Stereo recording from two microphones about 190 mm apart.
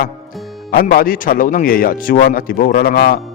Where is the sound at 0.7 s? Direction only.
50° left (ahead or behind).